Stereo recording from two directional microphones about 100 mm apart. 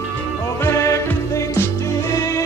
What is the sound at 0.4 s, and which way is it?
Music, 30° left (ahead or behind).